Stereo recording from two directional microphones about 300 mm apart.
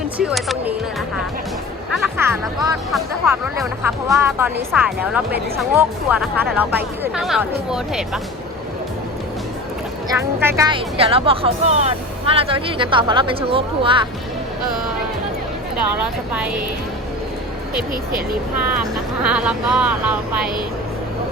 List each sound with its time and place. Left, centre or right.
0.2 s speech: centre
1.9 s speech: centre
10.1 s speech: centre
19.2 s speech: centre